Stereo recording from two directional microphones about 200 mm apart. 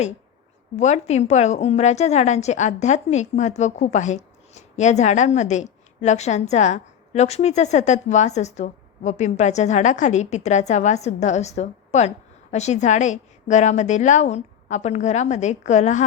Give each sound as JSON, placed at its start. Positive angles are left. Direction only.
{"t": 0.8, "sound": "a woman's voice", "side_deg": 35}